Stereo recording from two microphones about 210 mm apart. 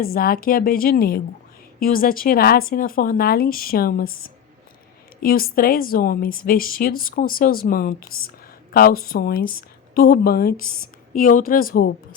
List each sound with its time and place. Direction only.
0.0 s speech: 45° left (ahead or behind)